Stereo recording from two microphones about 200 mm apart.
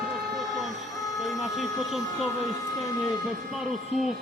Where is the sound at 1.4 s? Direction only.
Centre (ahead or behind).